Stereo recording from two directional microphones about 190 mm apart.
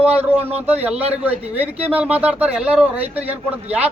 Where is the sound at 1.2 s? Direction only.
10° right (ahead or behind).